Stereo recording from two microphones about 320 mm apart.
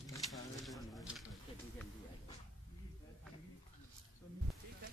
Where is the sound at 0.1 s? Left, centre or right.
Centre.